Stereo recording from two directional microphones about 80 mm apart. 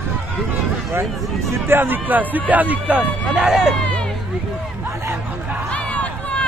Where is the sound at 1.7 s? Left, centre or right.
Right.